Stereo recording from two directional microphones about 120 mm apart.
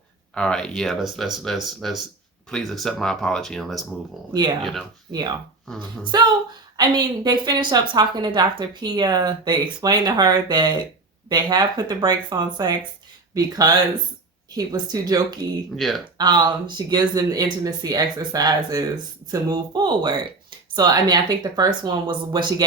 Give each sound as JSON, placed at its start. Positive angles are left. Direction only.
{"t": 0.3, "sound": "speech", "side_deg": 5}
{"t": 6.1, "sound": "speech", "side_deg": -35}
{"t": 15.7, "sound": "speech", "side_deg": 0}
{"t": 16.1, "sound": "speech", "side_deg": -40}